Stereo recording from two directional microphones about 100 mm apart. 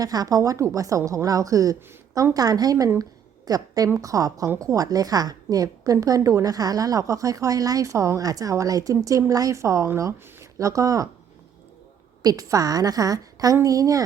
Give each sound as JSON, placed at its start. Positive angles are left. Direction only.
{"t": 0.0, "sound": "a woman's voice", "side_deg": -40}
{"t": 3.0, "sound": "a sound", "side_deg": -40}
{"t": 3.8, "sound": "a woman's voice", "side_deg": -30}
{"t": 12.2, "sound": "a woman's voice", "side_deg": -40}